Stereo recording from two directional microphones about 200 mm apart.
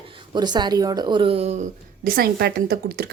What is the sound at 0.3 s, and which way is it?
A woman's voice, 20° right (ahead or behind).